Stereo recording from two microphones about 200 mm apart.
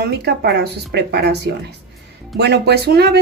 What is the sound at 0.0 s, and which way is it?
A woman's voice, 55° right (ahead or behind).